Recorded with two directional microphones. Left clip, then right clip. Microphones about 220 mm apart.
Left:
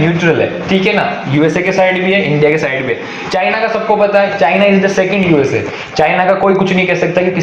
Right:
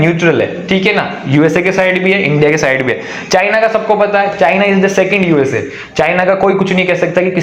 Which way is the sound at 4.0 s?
40° right (ahead or behind).